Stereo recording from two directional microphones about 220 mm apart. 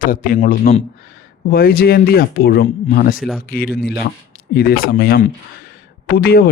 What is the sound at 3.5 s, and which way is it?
Speech, 45° left (ahead or behind).